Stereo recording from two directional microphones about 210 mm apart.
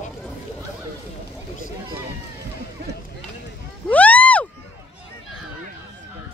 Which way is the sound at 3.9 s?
5° left (ahead or behind).